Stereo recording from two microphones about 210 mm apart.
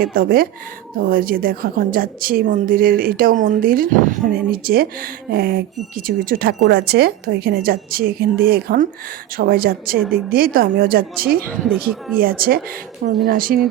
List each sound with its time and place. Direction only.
0.0 s a woman's voice: 45° right (ahead or behind)
11.4 s speech: centre (ahead or behind)
12.1 s a woman's voice: 45° right (ahead or behind)